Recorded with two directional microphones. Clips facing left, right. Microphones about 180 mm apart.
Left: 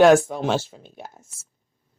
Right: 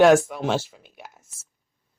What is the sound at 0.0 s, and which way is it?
Speech, 30° left (ahead or behind).